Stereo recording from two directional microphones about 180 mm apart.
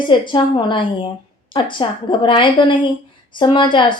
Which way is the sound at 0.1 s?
25° left (ahead or behind).